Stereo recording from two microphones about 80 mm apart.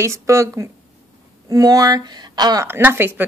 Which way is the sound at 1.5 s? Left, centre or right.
Right.